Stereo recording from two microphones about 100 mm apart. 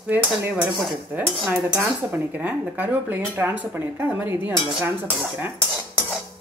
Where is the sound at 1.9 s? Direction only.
15° right (ahead or behind).